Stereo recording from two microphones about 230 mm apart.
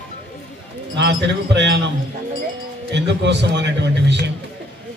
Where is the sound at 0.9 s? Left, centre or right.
Right.